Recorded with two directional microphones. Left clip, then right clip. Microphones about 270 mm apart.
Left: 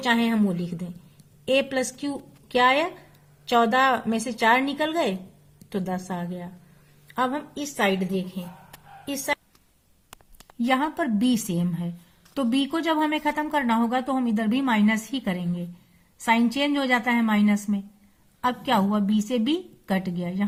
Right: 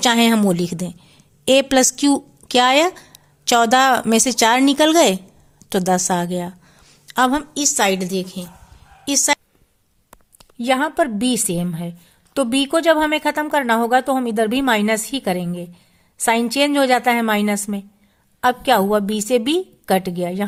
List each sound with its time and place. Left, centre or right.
0.0 s a woman's voice: right
10.6 s a woman's voice: right